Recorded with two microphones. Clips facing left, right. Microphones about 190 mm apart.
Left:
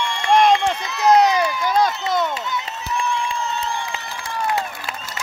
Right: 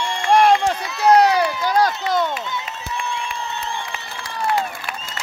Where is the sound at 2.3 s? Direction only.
20° right (ahead or behind).